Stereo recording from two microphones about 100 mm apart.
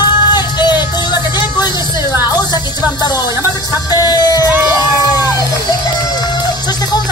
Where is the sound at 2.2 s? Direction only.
40° left (ahead or behind).